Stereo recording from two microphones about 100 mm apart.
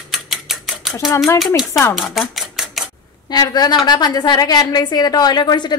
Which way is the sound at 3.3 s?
45° left (ahead or behind).